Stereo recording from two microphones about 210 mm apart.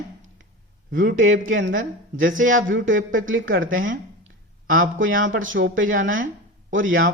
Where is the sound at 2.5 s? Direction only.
65° right (ahead or behind).